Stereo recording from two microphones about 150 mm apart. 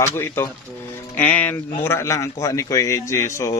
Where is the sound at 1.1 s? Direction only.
10° left (ahead or behind).